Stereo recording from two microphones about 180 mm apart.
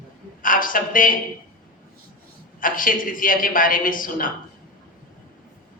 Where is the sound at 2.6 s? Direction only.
50° left (ahead or behind).